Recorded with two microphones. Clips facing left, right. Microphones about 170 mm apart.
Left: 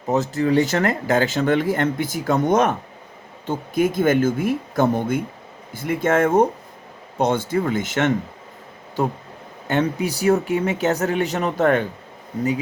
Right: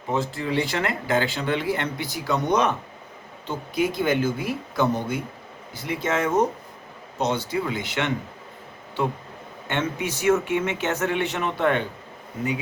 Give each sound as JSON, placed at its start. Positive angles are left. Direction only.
{"t": 0.1, "sound": "speech", "side_deg": 40}